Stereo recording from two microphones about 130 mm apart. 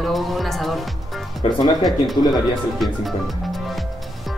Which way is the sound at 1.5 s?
30° left (ahead or behind).